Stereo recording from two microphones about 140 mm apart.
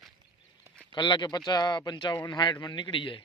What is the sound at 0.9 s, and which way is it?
Speech, 30° left (ahead or behind).